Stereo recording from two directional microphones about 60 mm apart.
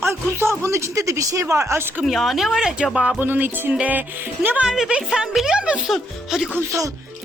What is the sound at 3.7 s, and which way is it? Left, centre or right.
Speech, right.